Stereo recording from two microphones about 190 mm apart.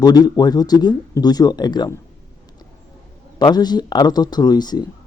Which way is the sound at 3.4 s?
20° left (ahead or behind).